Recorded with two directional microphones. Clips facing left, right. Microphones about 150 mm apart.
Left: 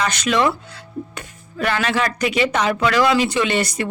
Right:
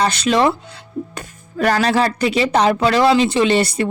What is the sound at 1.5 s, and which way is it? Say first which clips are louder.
Speech: right 5 dB; 40° right (ahead or behind).